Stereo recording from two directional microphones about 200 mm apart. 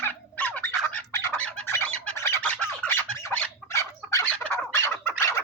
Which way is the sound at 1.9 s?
10° left (ahead or behind).